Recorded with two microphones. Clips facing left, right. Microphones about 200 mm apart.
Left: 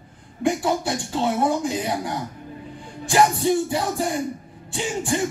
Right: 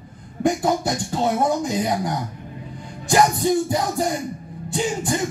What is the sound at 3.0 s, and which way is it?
Music, 40° right (ahead or behind).